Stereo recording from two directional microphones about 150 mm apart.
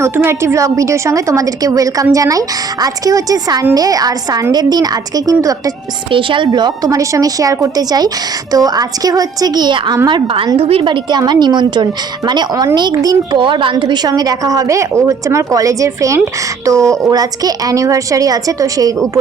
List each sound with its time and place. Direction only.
0.0 s a woman's voice: 15° right (ahead or behind)
6.1 s a woman's voice: 35° right (ahead or behind)